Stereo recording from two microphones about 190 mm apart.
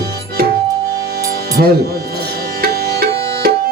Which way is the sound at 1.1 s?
55° right (ahead or behind).